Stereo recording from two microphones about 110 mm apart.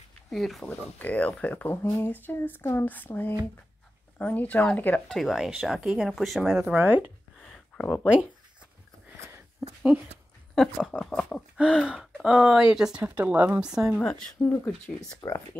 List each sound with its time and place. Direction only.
0.3 s speech: centre (ahead or behind)
0.9 s speech: 15° left (ahead or behind)
5.0 s speech: centre (ahead or behind)
6.6 s speech: 15° right (ahead or behind)
7.3 s a sound: centre (ahead or behind)
8.0 s speech: 5° right (ahead or behind)
9.1 s a sound: 25° right (ahead or behind)
9.6 s a sound: 5° right (ahead or behind)
10.5 s speech: 5° left (ahead or behind)
11.5 s speech: 5° right (ahead or behind)
13.9 s speech: 5° left (ahead or behind)
14.4 s speech: 20° left (ahead or behind)
15.0 s speech: 30° left (ahead or behind)